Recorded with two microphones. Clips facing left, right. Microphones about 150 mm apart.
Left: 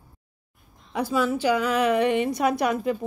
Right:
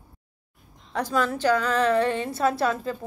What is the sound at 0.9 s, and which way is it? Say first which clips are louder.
A woman's voice: left 1 dB; 10° left (ahead or behind).